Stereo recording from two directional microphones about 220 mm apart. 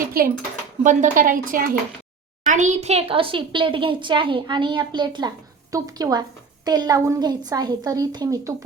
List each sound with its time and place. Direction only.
0.1 s a woman's voice: 40° right (ahead or behind); by 8.5 s 15° right (ahead or behind)